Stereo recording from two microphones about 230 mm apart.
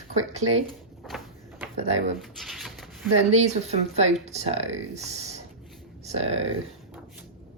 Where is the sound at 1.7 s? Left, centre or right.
Right.